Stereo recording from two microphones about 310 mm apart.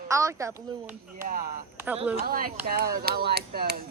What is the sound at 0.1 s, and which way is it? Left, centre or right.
Speech, centre.